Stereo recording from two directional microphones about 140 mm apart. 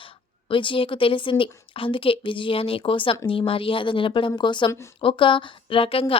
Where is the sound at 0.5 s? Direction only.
35° left (ahead or behind).